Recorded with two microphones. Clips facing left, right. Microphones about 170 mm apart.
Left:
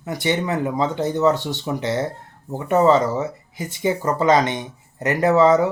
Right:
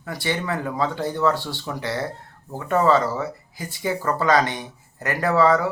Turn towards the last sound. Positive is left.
turn(degrees=20)  # may be behind; listen again after turning